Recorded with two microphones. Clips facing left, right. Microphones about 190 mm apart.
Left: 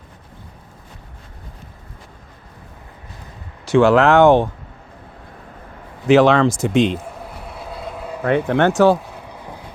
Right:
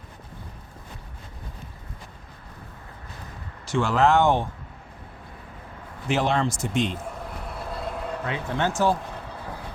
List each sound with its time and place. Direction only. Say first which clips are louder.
3.7 s speech: left 8 dB; 70° left (ahead or behind)
6.1 s speech: left 11 dB; 85° left
7.4 s vehicle: left 1 dB; centre (ahead or behind)
8.2 s speech: left 12 dB; 65° left (ahead or behind)
9.0 s vehicle: left 1 dB; 10° left (ahead or behind)